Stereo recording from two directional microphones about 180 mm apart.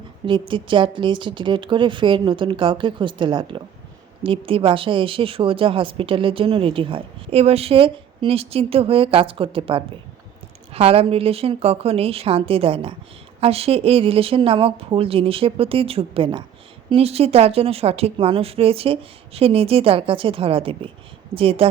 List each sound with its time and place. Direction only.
0.3 s a woman's voice: 25° right (ahead or behind)